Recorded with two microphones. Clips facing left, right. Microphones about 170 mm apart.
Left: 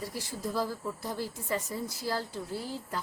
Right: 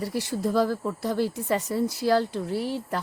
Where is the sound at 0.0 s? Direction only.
70° right (ahead or behind).